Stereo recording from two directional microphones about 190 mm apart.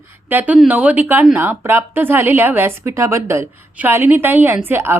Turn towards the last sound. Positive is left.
turn(degrees=-10)  # may be behind; listen again after turning